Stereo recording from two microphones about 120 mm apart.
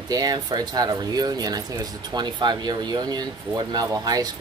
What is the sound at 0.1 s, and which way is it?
Speech, 35° right (ahead or behind).